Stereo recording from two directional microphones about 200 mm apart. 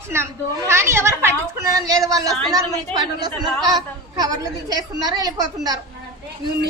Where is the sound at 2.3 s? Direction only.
Centre (ahead or behind).